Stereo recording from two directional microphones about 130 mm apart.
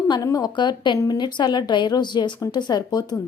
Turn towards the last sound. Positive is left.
turn(degrees=30)  # may be behind; listen again after turning